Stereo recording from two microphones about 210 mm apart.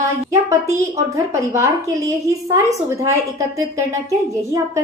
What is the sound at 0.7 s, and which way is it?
A woman's voice, 15° right (ahead or behind).